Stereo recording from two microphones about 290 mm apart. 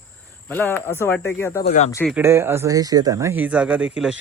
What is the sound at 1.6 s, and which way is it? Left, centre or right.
Speech, left.